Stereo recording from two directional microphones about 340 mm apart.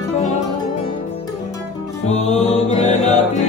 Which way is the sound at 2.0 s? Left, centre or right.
Centre.